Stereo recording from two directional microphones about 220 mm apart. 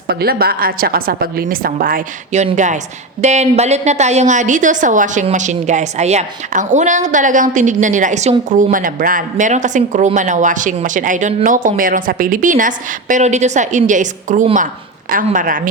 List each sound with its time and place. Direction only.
0.1 s a woman's voice: 45° right (ahead or behind)